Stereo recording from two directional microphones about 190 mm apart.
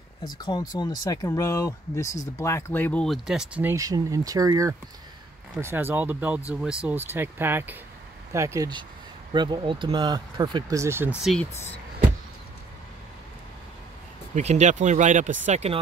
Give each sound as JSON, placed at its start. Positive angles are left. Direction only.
{"t": 0.2, "sound": "speech", "side_deg": 20}
{"t": 14.3, "sound": "speech", "side_deg": -35}